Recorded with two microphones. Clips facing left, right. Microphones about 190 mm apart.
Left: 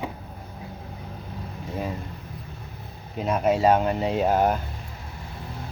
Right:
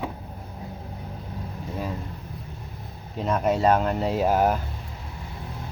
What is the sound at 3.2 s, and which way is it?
Speech, 5° left (ahead or behind).